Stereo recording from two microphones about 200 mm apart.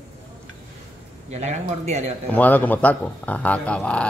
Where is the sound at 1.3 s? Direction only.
35° right (ahead or behind).